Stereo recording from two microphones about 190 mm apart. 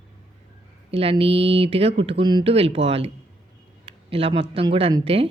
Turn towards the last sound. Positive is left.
turn(degrees=-30)  # may be behind; listen again after turning